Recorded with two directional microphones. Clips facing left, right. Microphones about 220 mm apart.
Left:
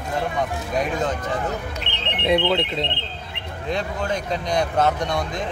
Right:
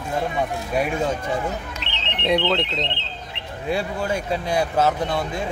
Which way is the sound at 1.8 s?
55° left (ahead or behind).